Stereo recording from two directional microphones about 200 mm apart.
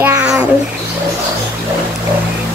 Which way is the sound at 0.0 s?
5° right (ahead or behind).